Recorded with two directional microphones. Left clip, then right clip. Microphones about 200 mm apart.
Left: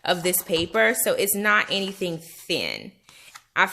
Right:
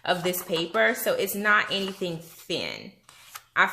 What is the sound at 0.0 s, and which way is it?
A woman's voice, 40° left (ahead or behind).